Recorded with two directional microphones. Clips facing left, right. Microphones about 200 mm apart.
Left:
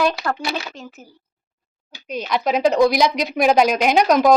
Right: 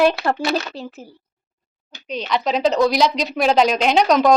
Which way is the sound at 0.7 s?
35° right (ahead or behind).